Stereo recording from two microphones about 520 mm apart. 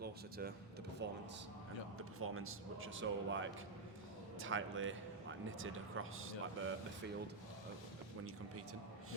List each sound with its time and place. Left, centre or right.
0.0 s a man's voice: centre